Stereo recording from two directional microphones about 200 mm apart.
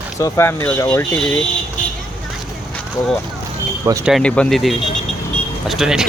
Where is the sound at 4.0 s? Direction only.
Centre (ahead or behind).